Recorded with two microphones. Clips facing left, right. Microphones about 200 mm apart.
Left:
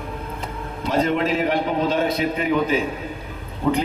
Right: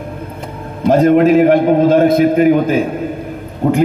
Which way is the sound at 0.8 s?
50° right (ahead or behind).